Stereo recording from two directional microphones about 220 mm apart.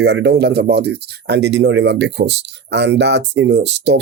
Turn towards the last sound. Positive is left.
turn(degrees=-55)  # may be behind; listen again after turning